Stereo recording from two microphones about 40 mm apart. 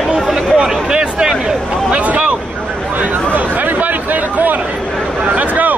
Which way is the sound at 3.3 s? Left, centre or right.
Right.